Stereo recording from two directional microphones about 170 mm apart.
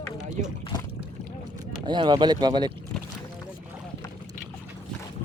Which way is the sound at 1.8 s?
25° right (ahead or behind).